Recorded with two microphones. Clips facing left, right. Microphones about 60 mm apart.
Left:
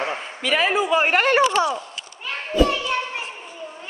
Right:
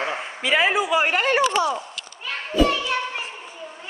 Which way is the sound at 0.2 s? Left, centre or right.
Centre.